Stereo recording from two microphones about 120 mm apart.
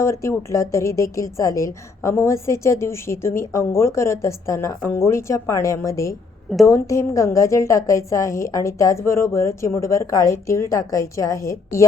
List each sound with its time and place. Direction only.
0.0 s a woman's voice: 25° left (ahead or behind)